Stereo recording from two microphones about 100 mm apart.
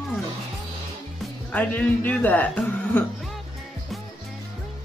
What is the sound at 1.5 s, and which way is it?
Speech, 15° left (ahead or behind).